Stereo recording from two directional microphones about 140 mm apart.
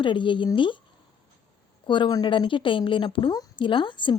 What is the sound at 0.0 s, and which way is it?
Speech, 35° left (ahead or behind).